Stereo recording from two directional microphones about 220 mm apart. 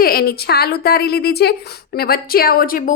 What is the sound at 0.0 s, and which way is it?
Speech, 45° left (ahead or behind).